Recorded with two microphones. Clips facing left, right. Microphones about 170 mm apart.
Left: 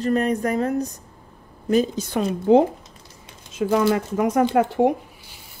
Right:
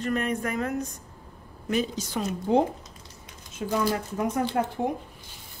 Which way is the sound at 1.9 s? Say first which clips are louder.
Left 6 dB; 60° left (ahead or behind).